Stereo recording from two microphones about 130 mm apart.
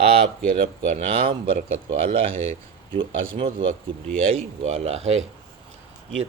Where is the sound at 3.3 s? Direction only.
45° right (ahead or behind).